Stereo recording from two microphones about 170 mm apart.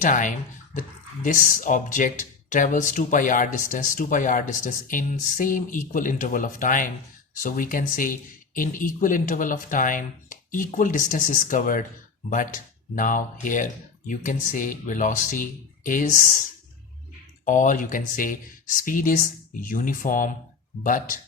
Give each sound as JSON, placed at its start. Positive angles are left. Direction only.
{"t": 0.0, "sound": "speech", "side_deg": 50}
{"t": 13.0, "sound": "speech", "side_deg": 50}
{"t": 17.4, "sound": "speech", "side_deg": 50}